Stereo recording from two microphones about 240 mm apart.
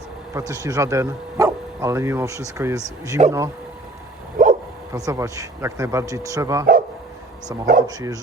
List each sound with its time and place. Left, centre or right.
0.3 s speech: centre
4.4 s bow-wow: right
4.9 s speech: centre
7.6 s speech: right
7.9 s speech: centre